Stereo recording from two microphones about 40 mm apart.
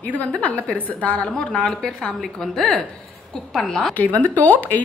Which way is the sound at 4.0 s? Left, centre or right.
Left.